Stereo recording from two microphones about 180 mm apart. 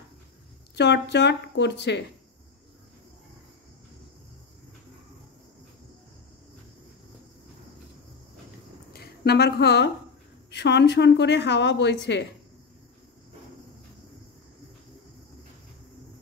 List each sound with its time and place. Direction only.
0.7 s speech: 75° left (ahead or behind)
8.9 s a woman's voice: 60° left (ahead or behind)